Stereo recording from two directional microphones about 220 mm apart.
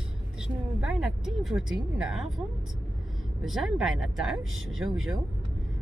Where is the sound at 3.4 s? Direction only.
Centre (ahead or behind).